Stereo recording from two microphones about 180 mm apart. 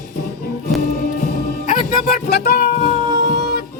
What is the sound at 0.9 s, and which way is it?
Music, 55° left (ahead or behind).